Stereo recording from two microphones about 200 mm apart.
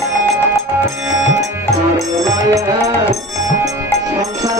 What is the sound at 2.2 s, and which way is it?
Music, 15° right (ahead or behind).